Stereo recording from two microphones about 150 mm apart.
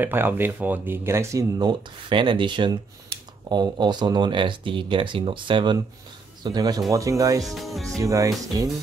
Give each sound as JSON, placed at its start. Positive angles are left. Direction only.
{"t": 0.0, "sound": "speech", "side_deg": -15}
{"t": 7.4, "sound": "speech", "side_deg": 0}
{"t": 8.0, "sound": "speech", "side_deg": -25}